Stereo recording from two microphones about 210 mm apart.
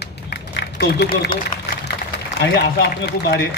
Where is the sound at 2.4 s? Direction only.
55° left (ahead or behind).